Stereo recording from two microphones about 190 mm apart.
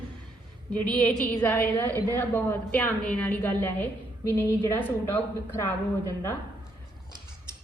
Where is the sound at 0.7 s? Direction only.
5° left (ahead or behind).